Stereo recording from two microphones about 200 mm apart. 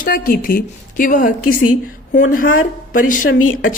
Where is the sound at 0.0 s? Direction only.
45° left (ahead or behind).